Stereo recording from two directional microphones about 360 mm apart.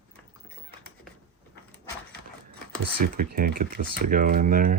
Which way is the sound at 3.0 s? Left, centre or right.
Right.